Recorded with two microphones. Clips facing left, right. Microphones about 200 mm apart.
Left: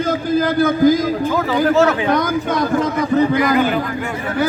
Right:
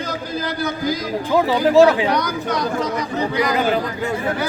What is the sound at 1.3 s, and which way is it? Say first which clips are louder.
Speech: right 4 dB; 15° right (ahead or behind).